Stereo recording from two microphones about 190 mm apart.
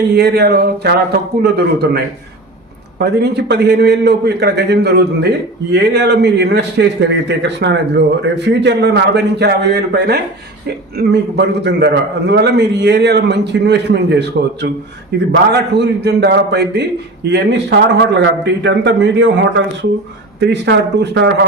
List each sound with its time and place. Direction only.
0.1 s a man's voice: 60° right (ahead or behind)